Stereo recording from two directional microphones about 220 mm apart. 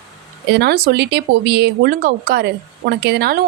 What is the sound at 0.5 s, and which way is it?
A woman's voice, 45° right (ahead or behind).